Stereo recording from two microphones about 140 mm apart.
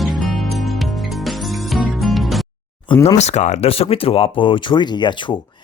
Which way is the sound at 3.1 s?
50° left (ahead or behind).